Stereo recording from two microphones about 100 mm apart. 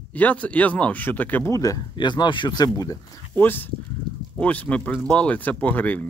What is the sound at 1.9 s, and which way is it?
Speech, 50° left (ahead or behind).